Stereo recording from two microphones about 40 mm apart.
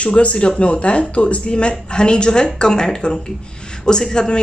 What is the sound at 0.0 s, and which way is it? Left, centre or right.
Speech, left.